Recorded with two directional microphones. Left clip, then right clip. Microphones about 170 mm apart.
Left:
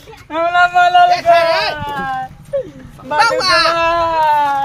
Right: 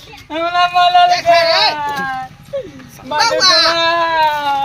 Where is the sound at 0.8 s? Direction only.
15° left (ahead or behind).